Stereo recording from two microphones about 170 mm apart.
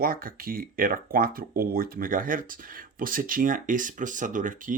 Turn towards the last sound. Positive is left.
turn(degrees=-50)  # may be behind; listen again after turning